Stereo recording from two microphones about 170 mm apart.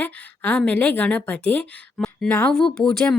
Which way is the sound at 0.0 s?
10° left (ahead or behind).